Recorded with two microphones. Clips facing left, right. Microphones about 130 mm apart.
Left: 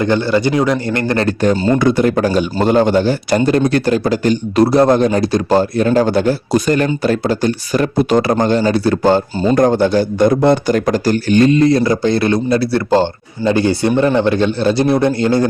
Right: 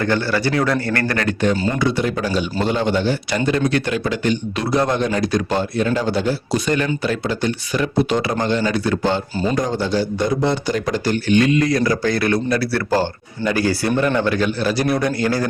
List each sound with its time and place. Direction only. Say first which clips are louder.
0.0 s a man's voice: left 5 dB; 20° left (ahead or behind); by 1.5 s 35° left (ahead or behind)
1.8 s a man's voice: left 7 dB; 50° left (ahead or behind)
9.6 s a man's voice: left 10 dB; 55° left (ahead or behind); by 15.4 s 25° left (ahead or behind)